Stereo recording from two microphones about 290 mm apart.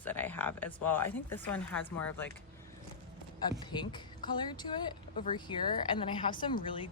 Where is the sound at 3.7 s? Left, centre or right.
Centre.